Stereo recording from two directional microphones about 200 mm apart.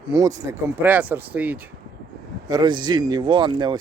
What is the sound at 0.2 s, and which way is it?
Speech, 15° right (ahead or behind).